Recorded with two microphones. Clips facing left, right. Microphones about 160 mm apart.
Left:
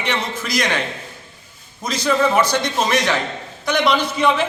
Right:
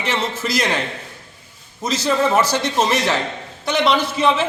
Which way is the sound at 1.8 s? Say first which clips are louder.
Even; 5° right (ahead or behind).